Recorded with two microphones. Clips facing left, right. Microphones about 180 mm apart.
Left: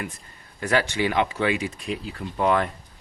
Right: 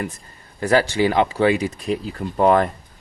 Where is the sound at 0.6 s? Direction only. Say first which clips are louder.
Right 6 dB; 35° right (ahead or behind).